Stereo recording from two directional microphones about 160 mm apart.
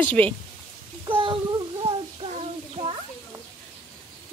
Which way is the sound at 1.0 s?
35° right (ahead or behind).